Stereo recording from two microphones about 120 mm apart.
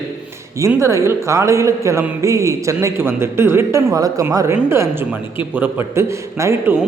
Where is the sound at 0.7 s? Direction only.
25° right (ahead or behind).